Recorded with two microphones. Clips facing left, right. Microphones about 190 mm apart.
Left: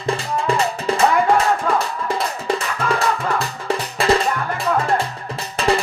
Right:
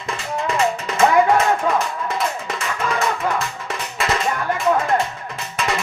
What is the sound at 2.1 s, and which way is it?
Music, 30° left (ahead or behind).